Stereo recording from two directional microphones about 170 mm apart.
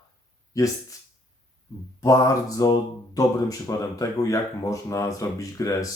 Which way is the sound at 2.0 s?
20° left (ahead or behind).